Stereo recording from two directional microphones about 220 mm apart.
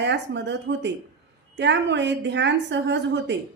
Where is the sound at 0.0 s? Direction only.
55° right (ahead or behind).